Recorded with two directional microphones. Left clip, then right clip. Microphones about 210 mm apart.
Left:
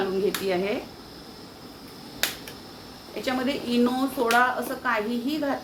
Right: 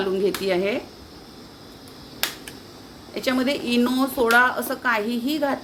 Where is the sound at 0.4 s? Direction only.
60° right (ahead or behind).